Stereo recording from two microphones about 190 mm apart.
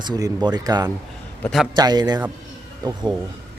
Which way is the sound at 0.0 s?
20° right (ahead or behind).